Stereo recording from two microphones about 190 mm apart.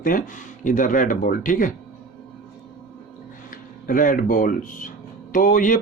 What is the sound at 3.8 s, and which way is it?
Speech, 45° left (ahead or behind).